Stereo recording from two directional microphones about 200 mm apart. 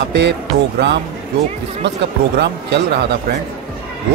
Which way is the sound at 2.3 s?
55° right (ahead or behind).